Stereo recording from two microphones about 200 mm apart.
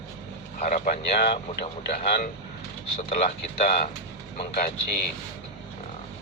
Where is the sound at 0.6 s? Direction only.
35° left (ahead or behind).